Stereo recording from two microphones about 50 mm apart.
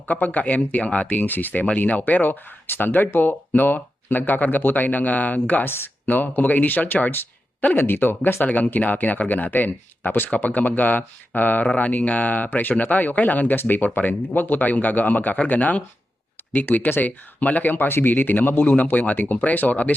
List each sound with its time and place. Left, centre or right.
0.1 s speech: left
1.6 s speech: left
7.6 s speech: left
10.2 s speech: left
11.6 s speech: left
17.8 s speech: left
18.1 s speech: left